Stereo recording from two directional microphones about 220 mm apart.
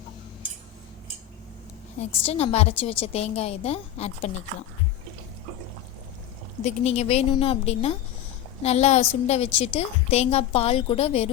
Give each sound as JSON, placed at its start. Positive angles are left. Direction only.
{"t": 2.0, "sound": "a woman's voice", "side_deg": 25}
{"t": 6.7, "sound": "a woman's voice", "side_deg": 30}